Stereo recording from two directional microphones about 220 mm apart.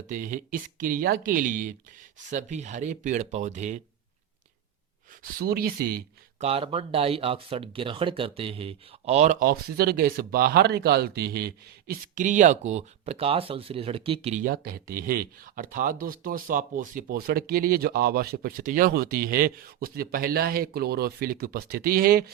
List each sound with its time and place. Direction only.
0.1 s speech: 35° right (ahead or behind)
5.2 s speech: 45° right (ahead or behind)
6.4 s speech: 25° right (ahead or behind); by 22.3 s 40° right (ahead or behind)